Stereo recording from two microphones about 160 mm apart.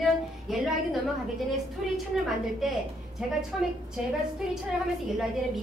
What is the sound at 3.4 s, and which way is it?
Speech, 5° right (ahead or behind).